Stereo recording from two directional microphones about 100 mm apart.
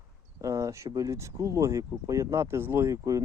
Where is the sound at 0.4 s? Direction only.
30° right (ahead or behind).